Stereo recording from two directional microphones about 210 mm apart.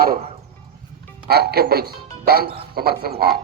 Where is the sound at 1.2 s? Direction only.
50° right (ahead or behind).